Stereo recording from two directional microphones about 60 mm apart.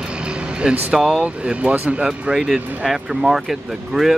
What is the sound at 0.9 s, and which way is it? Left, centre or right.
Speech, centre.